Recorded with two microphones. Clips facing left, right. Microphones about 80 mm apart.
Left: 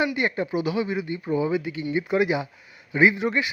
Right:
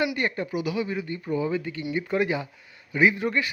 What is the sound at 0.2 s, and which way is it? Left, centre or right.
Speech, centre.